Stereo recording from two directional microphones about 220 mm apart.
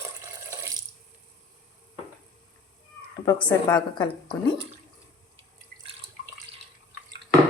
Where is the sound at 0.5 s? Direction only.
10° right (ahead or behind).